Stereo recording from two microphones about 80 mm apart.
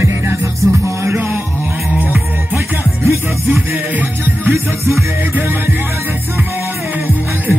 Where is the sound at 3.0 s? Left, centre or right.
Right.